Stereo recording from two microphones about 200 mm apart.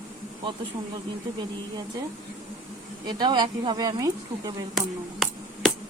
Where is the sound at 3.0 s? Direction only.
20° right (ahead or behind).